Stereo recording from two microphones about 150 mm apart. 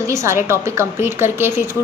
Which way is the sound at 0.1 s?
20° right (ahead or behind).